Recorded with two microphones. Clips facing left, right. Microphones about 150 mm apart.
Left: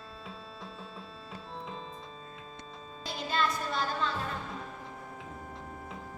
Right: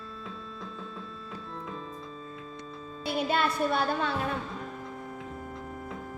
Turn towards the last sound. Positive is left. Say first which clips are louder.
# right 4 dB
turn(degrees=-65)  # may be behind; listen again after turning